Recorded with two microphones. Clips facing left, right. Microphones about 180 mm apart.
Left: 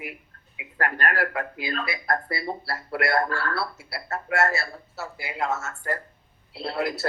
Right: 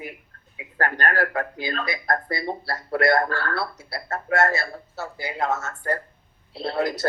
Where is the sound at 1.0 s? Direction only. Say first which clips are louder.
Right 3 dB; 35° right (ahead or behind).